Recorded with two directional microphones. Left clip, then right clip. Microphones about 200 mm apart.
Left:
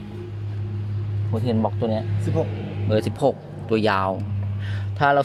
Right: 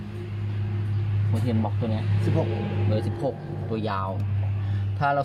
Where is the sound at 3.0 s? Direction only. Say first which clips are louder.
Left 12 dB; 45° left (ahead or behind).